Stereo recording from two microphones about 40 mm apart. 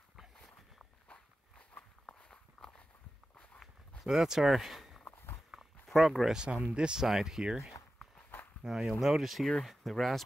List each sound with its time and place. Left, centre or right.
1.7 s walk: left
2.2 s walk: centre
4.0 s speech: centre
5.0 s walk: left
6.0 s speech: centre
6.3 s speech: right
7.0 s speech: centre